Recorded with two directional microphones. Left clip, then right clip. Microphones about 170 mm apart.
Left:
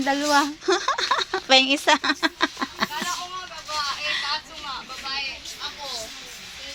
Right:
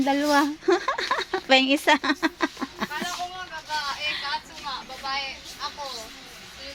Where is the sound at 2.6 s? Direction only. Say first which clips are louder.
Left 5 dB; 5° right (ahead or behind).